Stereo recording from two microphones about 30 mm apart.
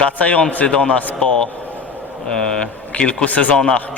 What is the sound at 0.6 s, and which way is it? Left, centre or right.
Speech, left.